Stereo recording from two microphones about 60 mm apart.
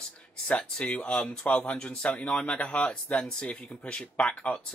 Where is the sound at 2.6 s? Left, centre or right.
Left.